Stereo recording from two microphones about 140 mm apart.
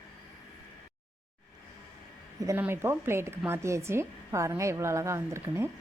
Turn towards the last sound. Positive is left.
turn(degrees=-20)  # may be behind; listen again after turning